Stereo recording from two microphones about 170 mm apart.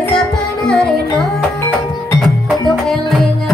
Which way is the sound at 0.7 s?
5° left (ahead or behind).